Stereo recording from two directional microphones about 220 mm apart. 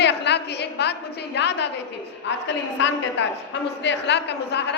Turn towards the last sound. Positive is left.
turn(degrees=50)  # may be behind; listen again after turning